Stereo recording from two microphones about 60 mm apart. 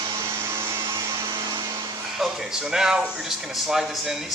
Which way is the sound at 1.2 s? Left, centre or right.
Right.